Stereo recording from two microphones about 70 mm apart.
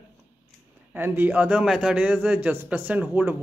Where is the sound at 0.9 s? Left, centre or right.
Right; by 1.9 s centre.